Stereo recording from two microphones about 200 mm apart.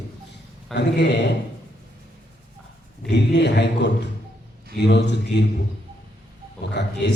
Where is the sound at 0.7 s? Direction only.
60° left (ahead or behind).